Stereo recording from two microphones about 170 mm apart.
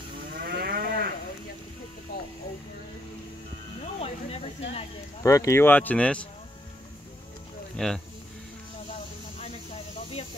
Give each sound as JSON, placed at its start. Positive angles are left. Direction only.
{"t": 0.4, "sound": "moo", "side_deg": -60}
{"t": 3.8, "sound": "snake", "side_deg": 35}
{"t": 5.2, "sound": "speech", "side_deg": 20}
{"t": 7.7, "sound": "speech", "side_deg": 5}